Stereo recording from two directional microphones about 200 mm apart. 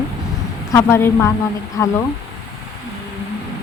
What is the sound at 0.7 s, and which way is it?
Speech, 15° left (ahead or behind).